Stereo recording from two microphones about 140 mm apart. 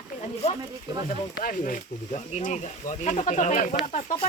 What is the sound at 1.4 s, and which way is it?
Speech, 75° left (ahead or behind).